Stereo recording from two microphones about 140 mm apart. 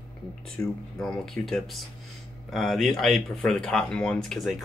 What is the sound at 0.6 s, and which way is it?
Speech, 15° left (ahead or behind).